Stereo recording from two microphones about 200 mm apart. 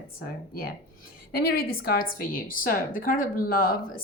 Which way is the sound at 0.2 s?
50° left (ahead or behind).